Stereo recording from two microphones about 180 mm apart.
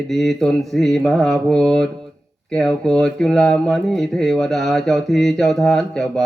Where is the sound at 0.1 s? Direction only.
Centre (ahead or behind).